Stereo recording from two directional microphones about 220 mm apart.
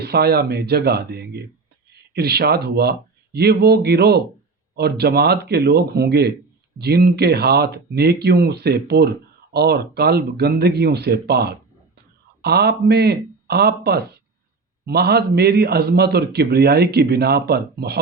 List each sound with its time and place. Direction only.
0.0 s speech: 45° right (ahead or behind)